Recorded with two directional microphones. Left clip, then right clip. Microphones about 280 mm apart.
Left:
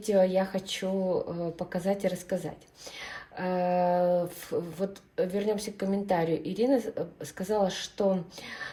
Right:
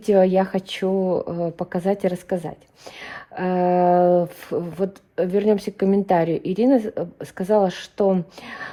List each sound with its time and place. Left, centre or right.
0.0 s a woman's voice: centre
1.0 s speech: right
1.5 s a woman's voice: centre